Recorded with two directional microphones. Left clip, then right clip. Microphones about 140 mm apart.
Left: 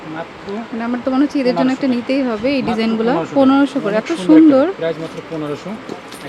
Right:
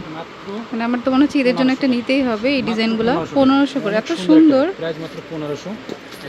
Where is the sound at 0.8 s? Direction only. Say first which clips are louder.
Right 1 dB; 15° right (ahead or behind); by 4.7 s 10° left (ahead or behind).